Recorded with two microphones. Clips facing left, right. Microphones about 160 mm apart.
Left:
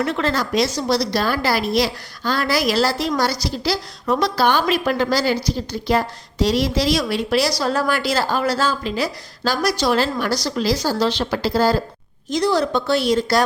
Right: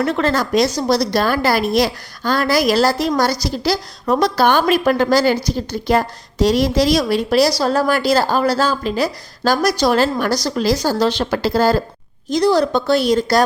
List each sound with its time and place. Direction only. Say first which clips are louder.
0.0 s a woman's voice: right 3 dB; 40° right (ahead or behind)
12.3 s a woman's voice: right 4 dB; 35° right (ahead or behind)